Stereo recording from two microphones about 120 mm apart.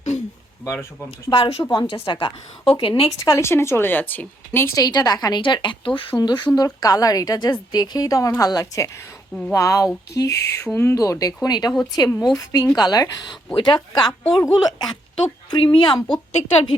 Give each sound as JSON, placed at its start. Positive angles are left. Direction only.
{"t": 0.6, "sound": "speech", "side_deg": 25}
{"t": 1.3, "sound": "a woman's voice", "side_deg": 50}
{"t": 2.7, "sound": "speech", "side_deg": 35}
{"t": 3.2, "sound": "a woman's voice", "side_deg": 25}
{"t": 4.8, "sound": "a woman's voice", "side_deg": 35}
{"t": 15.4, "sound": "speech", "side_deg": 45}
{"t": 16.3, "sound": "speech", "side_deg": 55}